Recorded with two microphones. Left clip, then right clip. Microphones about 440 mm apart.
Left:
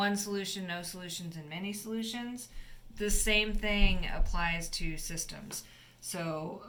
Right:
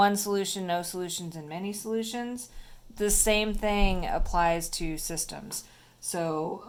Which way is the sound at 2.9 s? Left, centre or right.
Centre.